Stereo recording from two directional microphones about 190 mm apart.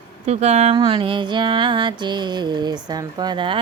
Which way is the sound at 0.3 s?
35° right (ahead or behind).